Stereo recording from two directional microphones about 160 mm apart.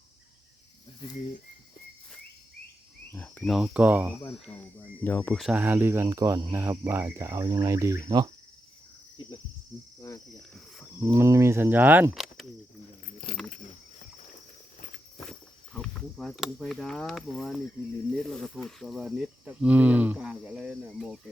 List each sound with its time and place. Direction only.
3.1 s speech: 10° left (ahead or behind); by 4.2 s 10° right (ahead or behind)
4.2 s speech: 10° left (ahead or behind)
5.4 s cricket: 5° right (ahead or behind); by 8.3 s 20° right (ahead or behind)
11.0 s cricket: 20° right (ahead or behind)
12.1 s a sound: centre (ahead or behind)
15.3 s cricket: 5° left (ahead or behind)
18.2 s speech: centre (ahead or behind)